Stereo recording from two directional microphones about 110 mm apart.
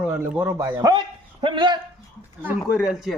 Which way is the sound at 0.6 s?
35° right (ahead or behind).